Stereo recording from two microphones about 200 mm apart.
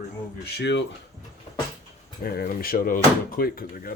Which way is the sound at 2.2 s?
50° left (ahead or behind).